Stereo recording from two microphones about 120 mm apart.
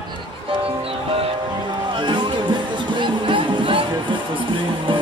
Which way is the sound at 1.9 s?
40° right (ahead or behind).